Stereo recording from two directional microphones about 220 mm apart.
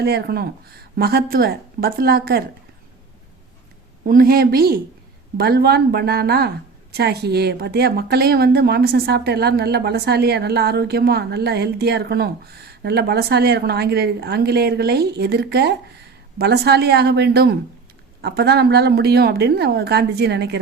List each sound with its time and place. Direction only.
0.0 s speech: 45° right (ahead or behind)
4.0 s speech: 40° right (ahead or behind)